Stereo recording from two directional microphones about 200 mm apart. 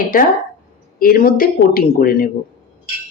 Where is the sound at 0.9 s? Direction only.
45° left (ahead or behind).